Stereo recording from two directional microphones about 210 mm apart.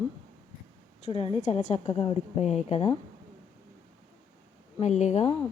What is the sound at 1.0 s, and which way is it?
A woman's voice, 30° left (ahead or behind).